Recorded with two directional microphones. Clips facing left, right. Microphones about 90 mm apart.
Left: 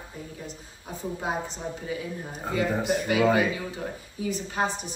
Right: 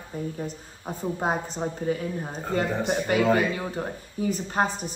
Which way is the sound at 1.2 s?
45° right (ahead or behind).